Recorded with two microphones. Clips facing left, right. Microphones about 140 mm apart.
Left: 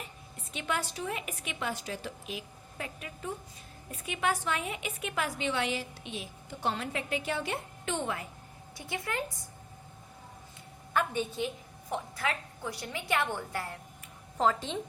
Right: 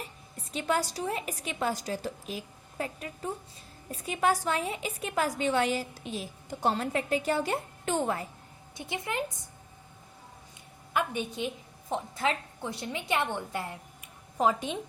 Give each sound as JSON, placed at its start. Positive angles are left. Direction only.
{"t": 0.5, "sound": "a woman's voice", "side_deg": -35}
{"t": 8.7, "sound": "a woman's voice", "side_deg": -20}
{"t": 10.9, "sound": "a woman's voice", "side_deg": -15}